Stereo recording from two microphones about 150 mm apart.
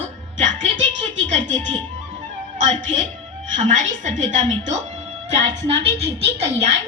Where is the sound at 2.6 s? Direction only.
60° right (ahead or behind); by 6.5 s 45° right (ahead or behind).